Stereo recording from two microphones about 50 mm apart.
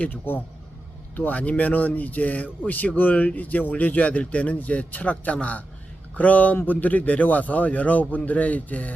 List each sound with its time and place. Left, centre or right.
0.0 s speech: left